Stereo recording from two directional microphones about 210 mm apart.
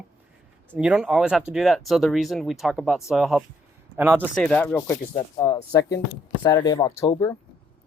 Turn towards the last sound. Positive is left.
turn(degrees=15)  # may be behind; listen again after turning